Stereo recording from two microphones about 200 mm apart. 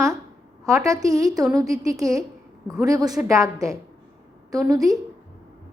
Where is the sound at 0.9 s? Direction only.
15° right (ahead or behind).